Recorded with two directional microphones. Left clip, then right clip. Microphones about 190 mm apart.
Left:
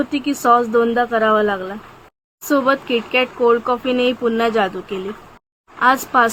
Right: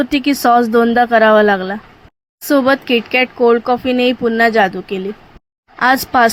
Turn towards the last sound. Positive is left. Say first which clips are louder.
# right 3 dB
turn(degrees=-25)  # may be behind; listen again after turning